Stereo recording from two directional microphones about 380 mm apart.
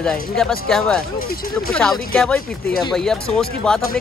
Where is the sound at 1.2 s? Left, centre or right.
Left.